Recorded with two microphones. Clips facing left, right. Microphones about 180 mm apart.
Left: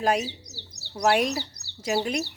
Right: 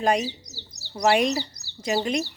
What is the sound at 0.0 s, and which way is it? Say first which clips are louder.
Speech: right 2 dB; 5° left (ahead or behind).